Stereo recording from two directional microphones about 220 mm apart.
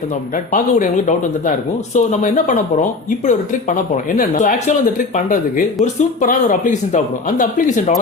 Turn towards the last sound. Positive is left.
turn(degrees=35)  # may be behind; listen again after turning